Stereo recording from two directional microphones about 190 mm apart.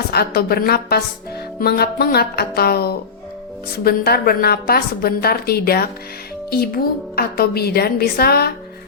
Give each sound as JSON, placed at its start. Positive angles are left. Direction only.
{"t": 0.1, "sound": "a woman's voice", "side_deg": 55}
{"t": 7.2, "sound": "a woman's voice", "side_deg": 55}